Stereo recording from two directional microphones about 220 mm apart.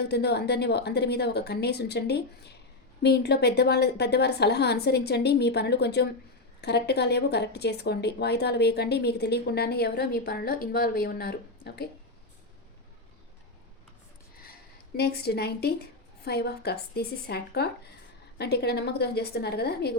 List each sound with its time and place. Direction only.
0.0 s speech: 50° left (ahead or behind)
14.9 s speech: 45° left (ahead or behind)